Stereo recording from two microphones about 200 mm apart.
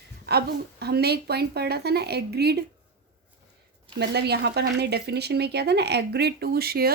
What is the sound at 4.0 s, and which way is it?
A woman's voice, 55° right (ahead or behind).